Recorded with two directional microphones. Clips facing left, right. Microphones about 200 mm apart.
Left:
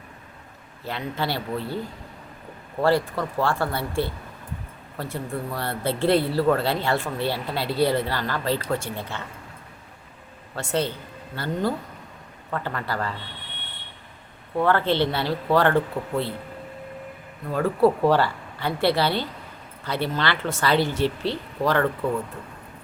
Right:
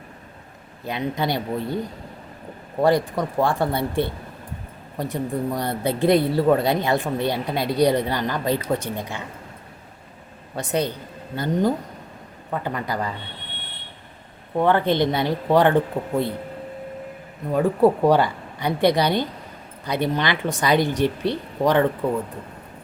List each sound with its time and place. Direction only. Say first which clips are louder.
0.9 s speech: right 4 dB; 15° right (ahead or behind)
2.8 s speech: right 2 dB; 15° right (ahead or behind)
10.5 s speech: right 2 dB; 15° right (ahead or behind)
14.5 s speech: right 2 dB; 20° right (ahead or behind)
17.5 s speech: right 2 dB; 15° right (ahead or behind)